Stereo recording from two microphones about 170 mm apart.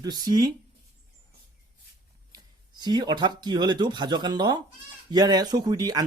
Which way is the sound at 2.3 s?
25° right (ahead or behind).